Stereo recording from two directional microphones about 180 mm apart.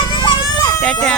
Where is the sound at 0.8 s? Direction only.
5° left (ahead or behind).